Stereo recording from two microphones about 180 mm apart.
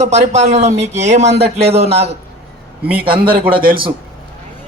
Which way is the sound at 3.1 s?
55° right (ahead or behind).